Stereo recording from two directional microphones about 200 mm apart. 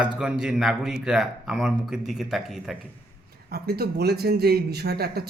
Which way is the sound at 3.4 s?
50° right (ahead or behind).